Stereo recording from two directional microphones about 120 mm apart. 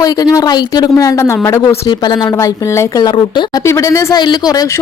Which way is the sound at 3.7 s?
25° left (ahead or behind).